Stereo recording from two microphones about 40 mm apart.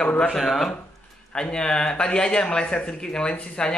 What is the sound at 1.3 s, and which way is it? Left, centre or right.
Speech, left.